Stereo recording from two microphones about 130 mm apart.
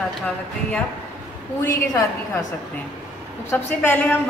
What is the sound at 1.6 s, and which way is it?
Speech, 20° left (ahead or behind).